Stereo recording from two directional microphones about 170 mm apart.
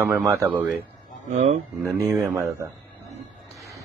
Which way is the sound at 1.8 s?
Centre (ahead or behind).